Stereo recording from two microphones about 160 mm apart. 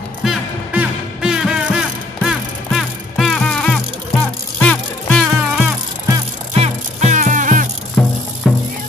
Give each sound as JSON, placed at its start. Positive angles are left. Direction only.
{"t": 0.2, "sound": "music", "side_deg": -5}
{"t": 6.6, "sound": "music", "side_deg": -45}
{"t": 8.0, "sound": "music", "side_deg": 5}